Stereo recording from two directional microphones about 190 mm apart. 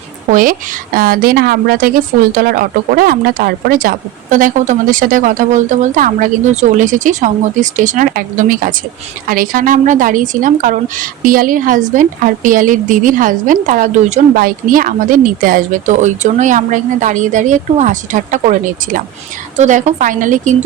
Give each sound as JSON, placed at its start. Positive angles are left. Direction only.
{"t": 0.9, "sound": "a woman's voice", "side_deg": -50}